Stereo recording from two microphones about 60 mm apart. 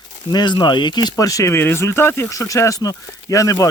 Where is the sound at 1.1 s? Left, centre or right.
Left.